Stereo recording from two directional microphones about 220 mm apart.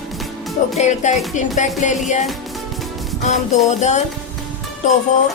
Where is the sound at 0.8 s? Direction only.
30° left (ahead or behind).